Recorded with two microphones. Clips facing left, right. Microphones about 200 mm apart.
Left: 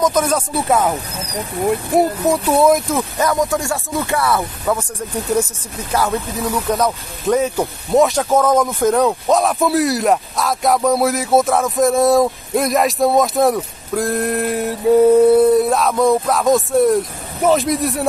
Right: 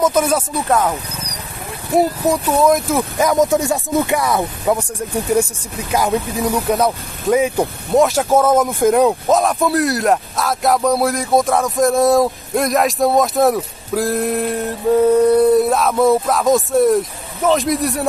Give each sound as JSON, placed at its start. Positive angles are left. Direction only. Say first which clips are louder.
{"t": 0.0, "sound": "speech", "louder": "right 1 dB", "side_deg": -10}
{"t": 0.7, "sound": "speech", "louder": "even", "side_deg": 5}
{"t": 2.0, "sound": "speech", "louder": "right 2 dB", "side_deg": 0}
{"t": 2.4, "sound": "speech", "louder": "left 2 dB", "side_deg": 10}
{"t": 3.0, "sound": "speech", "louder": "right 3 dB", "side_deg": -15}
{"t": 9.4, "sound": "speech", "louder": "even", "side_deg": 0}